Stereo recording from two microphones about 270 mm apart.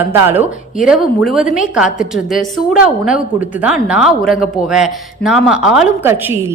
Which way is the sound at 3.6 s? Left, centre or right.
Centre.